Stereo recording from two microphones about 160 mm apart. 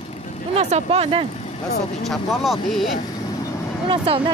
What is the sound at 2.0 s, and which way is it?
Speech, centre (ahead or behind).